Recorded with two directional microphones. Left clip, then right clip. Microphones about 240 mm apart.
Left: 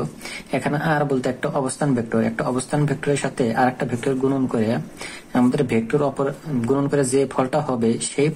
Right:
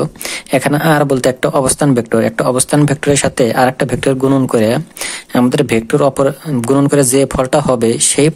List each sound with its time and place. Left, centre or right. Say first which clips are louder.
0.5 s speech: right 10 dB; right